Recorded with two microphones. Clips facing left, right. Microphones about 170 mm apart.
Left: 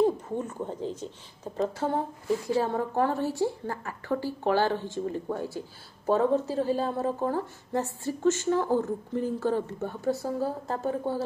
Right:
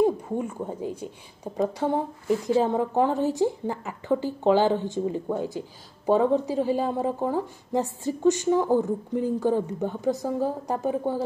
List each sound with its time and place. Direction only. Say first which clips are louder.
0.0 s a woman's voice: right 2 dB; 10° right (ahead or behind)